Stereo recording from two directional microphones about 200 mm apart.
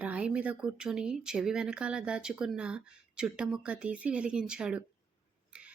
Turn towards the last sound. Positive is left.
turn(degrees=-5)  # may be behind; listen again after turning